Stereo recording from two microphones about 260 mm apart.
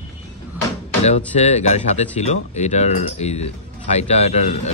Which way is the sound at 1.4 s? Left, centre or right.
Left.